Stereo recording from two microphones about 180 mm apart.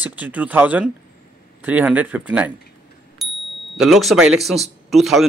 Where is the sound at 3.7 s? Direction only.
Centre (ahead or behind).